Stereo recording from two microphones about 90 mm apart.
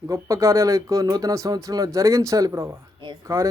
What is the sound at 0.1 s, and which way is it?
A man's voice, 35° right (ahead or behind).